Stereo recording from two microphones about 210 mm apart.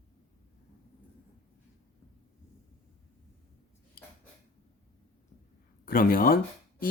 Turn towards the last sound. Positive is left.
turn(degrees=45)  # may be behind; listen again after turning